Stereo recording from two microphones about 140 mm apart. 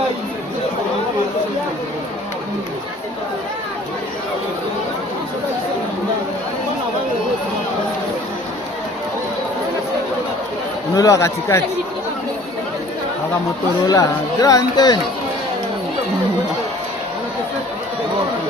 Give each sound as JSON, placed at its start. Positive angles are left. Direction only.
{"t": 10.9, "sound": "speech", "side_deg": 25}
{"t": 13.8, "sound": "speech", "side_deg": 25}